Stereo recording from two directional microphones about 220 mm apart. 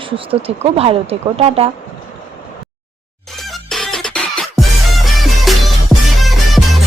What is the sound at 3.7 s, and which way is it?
Music, centre (ahead or behind).